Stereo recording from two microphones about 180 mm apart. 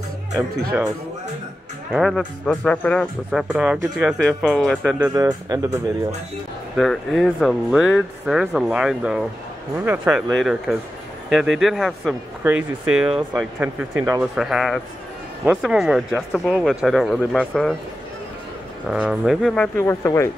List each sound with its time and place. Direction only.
1.9 s speech: centre (ahead or behind)
3.3 s speech: 5° right (ahead or behind)
4.9 s speech: 15° right (ahead or behind)
6.8 s speech: centre (ahead or behind)
18.9 s speech: 5° right (ahead or behind); by 20.2 s 15° left (ahead or behind)